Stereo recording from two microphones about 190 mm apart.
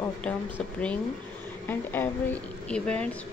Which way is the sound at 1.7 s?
10° left (ahead or behind).